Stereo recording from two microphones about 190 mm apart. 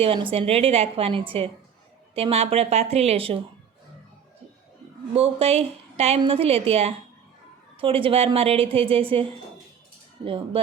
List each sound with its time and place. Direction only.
0.0 s a woman's voice: 30° right (ahead or behind)
5.1 s a woman's voice: 30° right (ahead or behind)
10.2 s a woman's voice: 30° right (ahead or behind)